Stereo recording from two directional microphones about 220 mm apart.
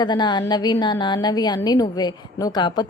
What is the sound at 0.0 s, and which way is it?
A woman's voice, 20° left (ahead or behind).